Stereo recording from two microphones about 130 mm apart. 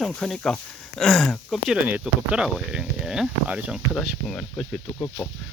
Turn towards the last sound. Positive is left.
turn(degrees=15)  # may be behind; listen again after turning